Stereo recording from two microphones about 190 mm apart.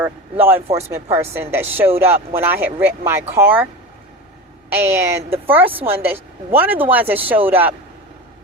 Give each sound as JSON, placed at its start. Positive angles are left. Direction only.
{"t": 0.0, "sound": "speech", "side_deg": -10}
{"t": 1.9, "sound": "speech", "side_deg": -30}
{"t": 2.3, "sound": "speech", "side_deg": -10}
{"t": 4.7, "sound": "speech", "side_deg": -10}